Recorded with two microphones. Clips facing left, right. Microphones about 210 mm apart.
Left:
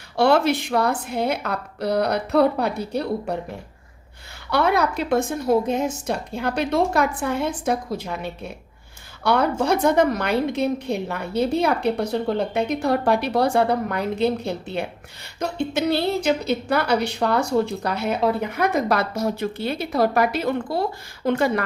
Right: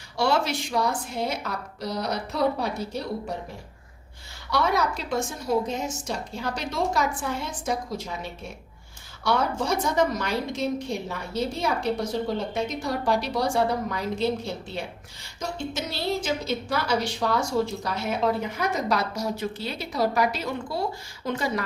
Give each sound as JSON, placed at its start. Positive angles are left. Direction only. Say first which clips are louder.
{"t": 0.2, "sound": "a woman's voice", "louder": "left 7 dB", "side_deg": 60}
{"t": 4.4, "sound": "a woman's voice", "louder": "left 4 dB", "side_deg": 60}